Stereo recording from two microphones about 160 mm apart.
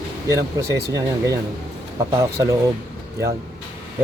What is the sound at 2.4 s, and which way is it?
Speech, 20° right (ahead or behind).